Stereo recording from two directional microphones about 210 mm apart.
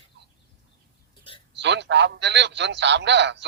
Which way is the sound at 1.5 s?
55° right (ahead or behind).